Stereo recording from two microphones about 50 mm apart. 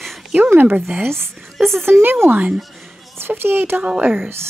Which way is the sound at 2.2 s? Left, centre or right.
Right.